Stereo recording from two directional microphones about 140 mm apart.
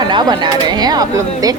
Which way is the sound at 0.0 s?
30° right (ahead or behind).